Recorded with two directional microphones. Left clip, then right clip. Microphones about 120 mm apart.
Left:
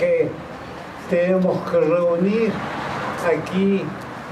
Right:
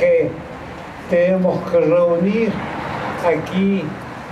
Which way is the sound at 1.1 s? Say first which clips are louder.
Right 3 dB; 45° left (ahead or behind).